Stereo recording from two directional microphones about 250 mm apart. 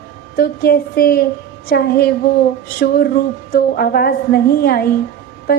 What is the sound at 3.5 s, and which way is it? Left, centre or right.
A woman's voice, left.